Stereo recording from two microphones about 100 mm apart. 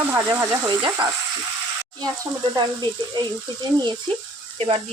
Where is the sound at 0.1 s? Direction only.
25° right (ahead or behind).